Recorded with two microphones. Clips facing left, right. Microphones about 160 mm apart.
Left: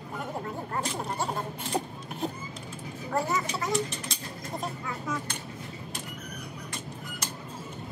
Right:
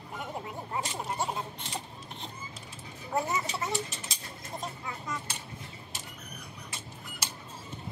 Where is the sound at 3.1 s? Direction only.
20° right (ahead or behind).